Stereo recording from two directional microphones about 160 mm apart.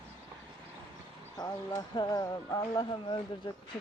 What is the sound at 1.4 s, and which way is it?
Speech, 25° left (ahead or behind).